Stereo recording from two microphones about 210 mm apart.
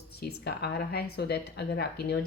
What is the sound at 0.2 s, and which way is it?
A woman's voice, 50° left (ahead or behind).